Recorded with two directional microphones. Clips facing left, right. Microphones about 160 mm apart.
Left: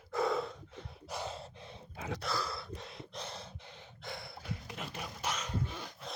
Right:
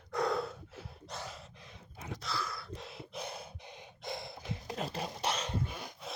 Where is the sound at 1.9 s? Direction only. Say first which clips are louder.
Left 5 dB; 85° left.